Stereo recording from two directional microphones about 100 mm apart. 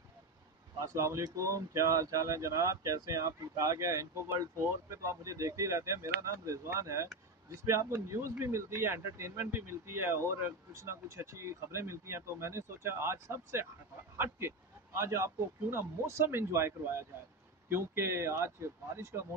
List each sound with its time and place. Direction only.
0.7 s speech: 30° right (ahead or behind)